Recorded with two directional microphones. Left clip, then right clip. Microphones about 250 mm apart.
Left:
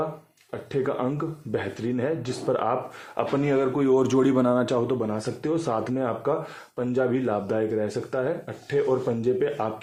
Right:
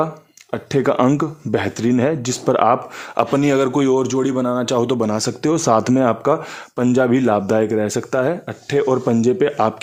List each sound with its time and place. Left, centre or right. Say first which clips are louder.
0.5 s a man's voice: right 10 dB; right
3.9 s speech: right 3 dB; centre
4.9 s speech: right 8 dB; right